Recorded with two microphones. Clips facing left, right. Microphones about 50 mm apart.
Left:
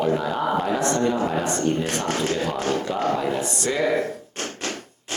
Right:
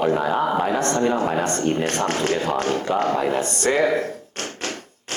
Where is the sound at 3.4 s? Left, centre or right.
Right.